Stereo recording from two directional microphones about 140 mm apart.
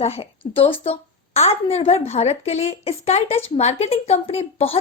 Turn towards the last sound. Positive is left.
turn(degrees=45)  # may be behind; listen again after turning